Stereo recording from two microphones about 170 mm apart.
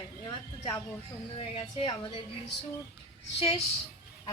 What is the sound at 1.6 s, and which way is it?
Speech, 30° left (ahead or behind).